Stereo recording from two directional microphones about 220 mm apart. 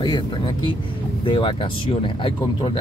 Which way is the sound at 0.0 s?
20° left (ahead or behind).